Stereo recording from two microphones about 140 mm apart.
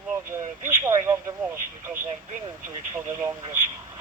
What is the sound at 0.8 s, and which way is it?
Speech, 20° right (ahead or behind).